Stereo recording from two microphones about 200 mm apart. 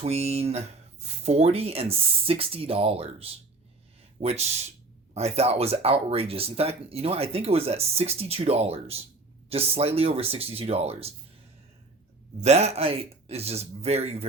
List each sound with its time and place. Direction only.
0.0 s speech: 30° right (ahead or behind)
12.4 s speech: 30° right (ahead or behind)